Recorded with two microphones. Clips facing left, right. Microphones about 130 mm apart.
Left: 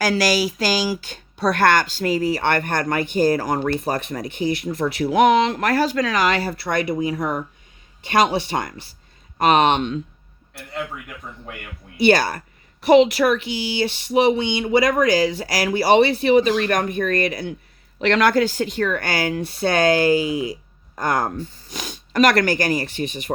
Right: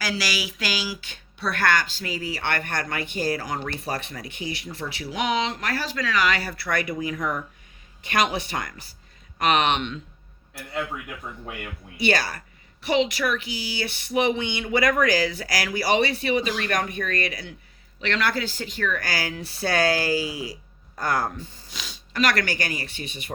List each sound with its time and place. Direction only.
0.0 s speech: 45° left (ahead or behind)
6.4 s speech: 25° left (ahead or behind)
12.0 s a woman's voice: 35° left (ahead or behind)
13.7 s speech: 25° left (ahead or behind)
15.4 s speech: 35° left (ahead or behind)
21.2 s speech: 45° left (ahead or behind)